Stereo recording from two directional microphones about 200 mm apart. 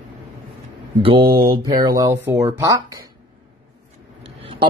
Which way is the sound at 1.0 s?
25° right (ahead or behind).